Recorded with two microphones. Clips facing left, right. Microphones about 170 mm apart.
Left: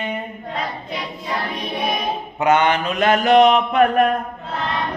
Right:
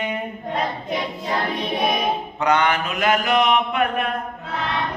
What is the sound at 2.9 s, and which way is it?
Mantra, 35° left (ahead or behind).